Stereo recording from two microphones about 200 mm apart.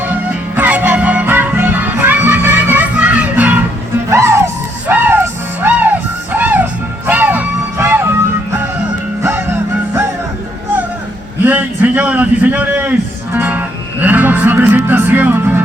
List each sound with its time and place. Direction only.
0.0 s music: 5° right (ahead or behind)
11.4 s a sound: 10° right (ahead or behind)
13.3 s music: 10° right (ahead or behind)